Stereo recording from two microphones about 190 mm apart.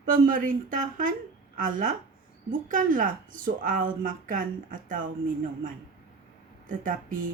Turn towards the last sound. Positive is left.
turn(degrees=-45)  # may be behind; listen again after turning